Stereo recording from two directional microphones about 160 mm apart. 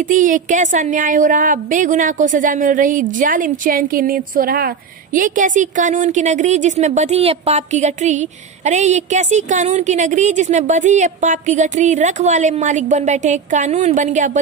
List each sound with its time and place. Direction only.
0.1 s speech: 55° right (ahead or behind)